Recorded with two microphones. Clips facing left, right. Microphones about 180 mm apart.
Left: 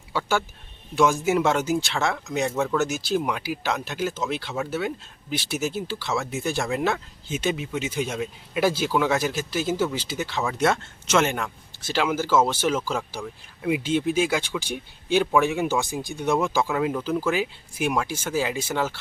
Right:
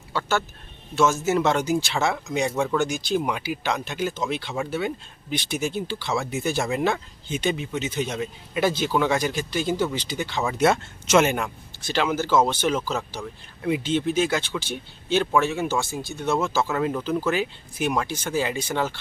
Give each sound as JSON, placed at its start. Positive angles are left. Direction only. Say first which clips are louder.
{"t": 0.1, "sound": "speech", "louder": "even", "side_deg": 10}
{"t": 11.8, "sound": "speech", "louder": "even", "side_deg": 5}